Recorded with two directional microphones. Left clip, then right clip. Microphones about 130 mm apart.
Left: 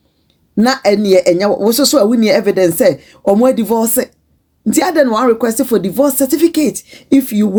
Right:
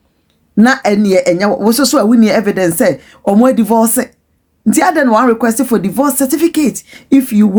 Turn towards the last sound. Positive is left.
turn(degrees=-20)  # may be behind; listen again after turning